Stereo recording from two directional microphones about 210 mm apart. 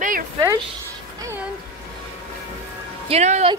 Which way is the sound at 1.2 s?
10° right (ahead or behind).